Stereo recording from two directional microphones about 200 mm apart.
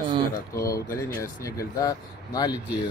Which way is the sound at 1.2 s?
15° left (ahead or behind).